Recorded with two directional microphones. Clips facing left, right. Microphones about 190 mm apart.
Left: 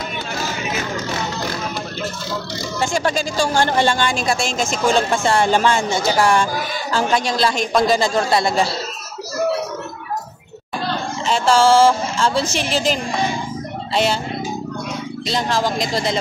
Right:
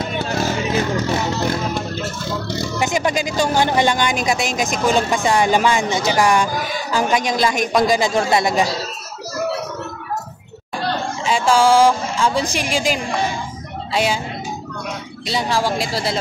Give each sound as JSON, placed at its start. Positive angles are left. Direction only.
{"t": 2.8, "sound": "speech", "side_deg": -20}
{"t": 11.2, "sound": "speech", "side_deg": -15}
{"t": 15.2, "sound": "speech", "side_deg": -10}